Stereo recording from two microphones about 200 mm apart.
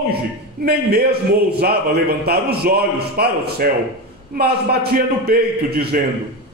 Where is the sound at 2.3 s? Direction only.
50° right (ahead or behind).